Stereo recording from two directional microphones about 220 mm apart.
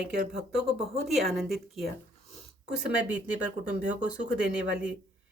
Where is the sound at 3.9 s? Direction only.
5° right (ahead or behind).